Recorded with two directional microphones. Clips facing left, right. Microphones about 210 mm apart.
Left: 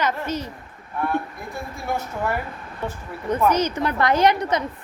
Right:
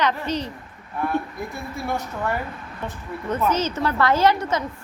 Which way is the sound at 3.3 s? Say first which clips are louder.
Left 3 dB; 15° left (ahead or behind).